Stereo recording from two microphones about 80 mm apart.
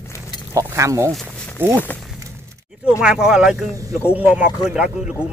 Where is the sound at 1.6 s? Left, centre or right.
Right.